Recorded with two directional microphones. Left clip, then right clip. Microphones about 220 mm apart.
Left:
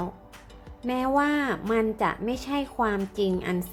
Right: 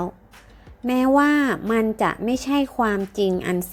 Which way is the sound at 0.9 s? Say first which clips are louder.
Right 6 dB; 25° right (ahead or behind).